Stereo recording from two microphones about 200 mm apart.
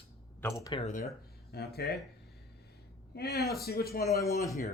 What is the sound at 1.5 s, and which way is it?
Speech, 55° left (ahead or behind).